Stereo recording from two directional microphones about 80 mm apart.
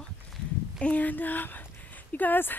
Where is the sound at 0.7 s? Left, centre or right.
Centre.